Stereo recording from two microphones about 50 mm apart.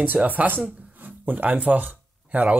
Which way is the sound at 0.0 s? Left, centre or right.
Right.